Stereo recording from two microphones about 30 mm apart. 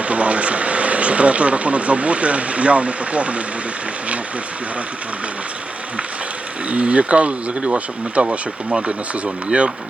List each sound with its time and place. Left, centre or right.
0.0 s speech: right
6.7 s speech: right